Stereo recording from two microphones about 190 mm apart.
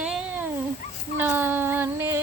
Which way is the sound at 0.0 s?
5° right (ahead or behind).